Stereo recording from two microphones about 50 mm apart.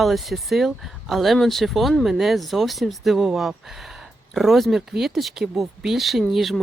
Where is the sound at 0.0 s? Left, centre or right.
Centre.